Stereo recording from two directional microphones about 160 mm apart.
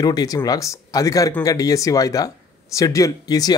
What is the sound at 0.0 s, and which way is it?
Speech, 25° left (ahead or behind).